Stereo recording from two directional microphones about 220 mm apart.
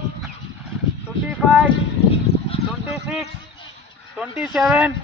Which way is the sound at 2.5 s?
25° left (ahead or behind).